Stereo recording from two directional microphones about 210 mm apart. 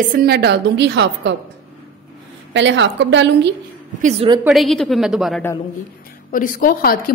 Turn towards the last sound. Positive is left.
turn(degrees=45)  # may be behind; listen again after turning